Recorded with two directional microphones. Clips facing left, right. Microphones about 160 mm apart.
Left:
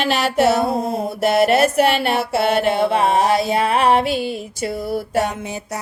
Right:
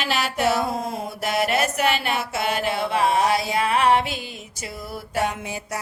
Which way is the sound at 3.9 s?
55° left (ahead or behind).